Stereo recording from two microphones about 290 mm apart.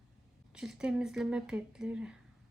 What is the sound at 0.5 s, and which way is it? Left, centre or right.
Speech, centre.